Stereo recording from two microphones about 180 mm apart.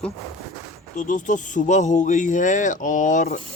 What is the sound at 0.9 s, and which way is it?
A man's voice, 45° left (ahead or behind).